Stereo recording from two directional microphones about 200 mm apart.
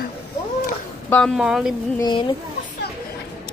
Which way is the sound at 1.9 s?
20° left (ahead or behind).